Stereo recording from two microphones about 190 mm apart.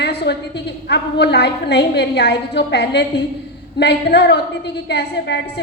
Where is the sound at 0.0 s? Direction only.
60° left (ahead or behind).